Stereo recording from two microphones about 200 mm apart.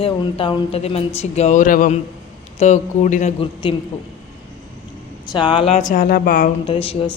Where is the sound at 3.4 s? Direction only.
25° left (ahead or behind).